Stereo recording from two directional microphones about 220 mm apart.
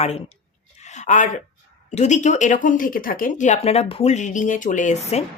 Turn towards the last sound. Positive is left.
turn(degrees=30)  # may be behind; listen again after turning